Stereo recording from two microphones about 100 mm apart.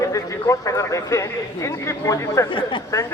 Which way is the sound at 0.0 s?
30° left (ahead or behind).